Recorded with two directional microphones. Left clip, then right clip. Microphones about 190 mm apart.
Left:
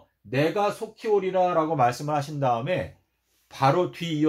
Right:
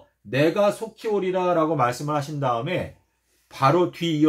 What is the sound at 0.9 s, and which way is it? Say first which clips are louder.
Speech: left 1 dB; 25° left (ahead or behind).